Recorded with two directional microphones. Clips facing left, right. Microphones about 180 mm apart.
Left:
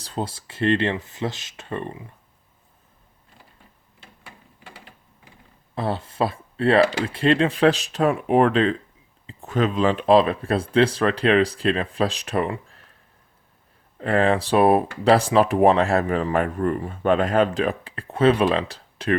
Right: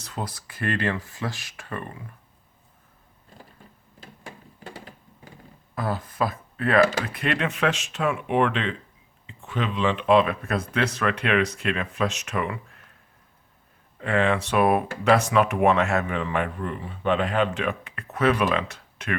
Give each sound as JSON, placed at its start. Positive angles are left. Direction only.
{"t": 0.0, "sound": "speech", "side_deg": 30}
{"t": 4.6, "sound": "a sound", "side_deg": -40}
{"t": 5.7, "sound": "speech", "side_deg": 25}
{"t": 14.0, "sound": "speech", "side_deg": 35}